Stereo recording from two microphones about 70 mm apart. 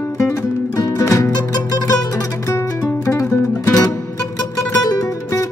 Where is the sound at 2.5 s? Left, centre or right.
Left.